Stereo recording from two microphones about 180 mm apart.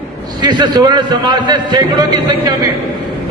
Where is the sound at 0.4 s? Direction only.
25° right (ahead or behind).